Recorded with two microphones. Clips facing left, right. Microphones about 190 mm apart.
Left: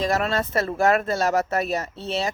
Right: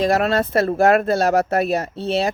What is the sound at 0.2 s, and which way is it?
Speech, 65° right (ahead or behind).